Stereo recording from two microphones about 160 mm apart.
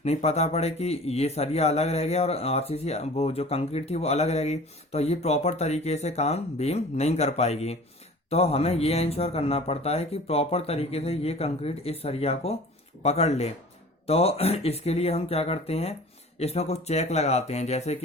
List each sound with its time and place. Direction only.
0.0 s a man's voice: 40° left (ahead or behind)